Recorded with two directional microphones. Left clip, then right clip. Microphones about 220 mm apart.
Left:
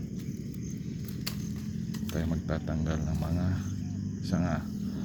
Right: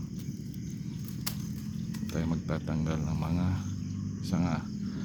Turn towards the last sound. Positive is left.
turn(degrees=-10)  # may be behind; listen again after turning